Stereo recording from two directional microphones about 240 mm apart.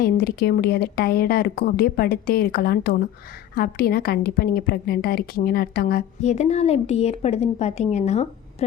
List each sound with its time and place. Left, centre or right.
0.0 s a woman's voice: left